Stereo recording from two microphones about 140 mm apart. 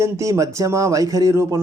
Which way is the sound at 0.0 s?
20° right (ahead or behind).